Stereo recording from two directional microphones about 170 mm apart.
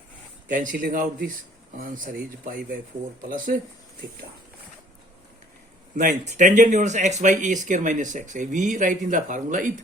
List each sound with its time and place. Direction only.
0.4 s speech: 50° right (ahead or behind)
6.0 s speech: 50° right (ahead or behind)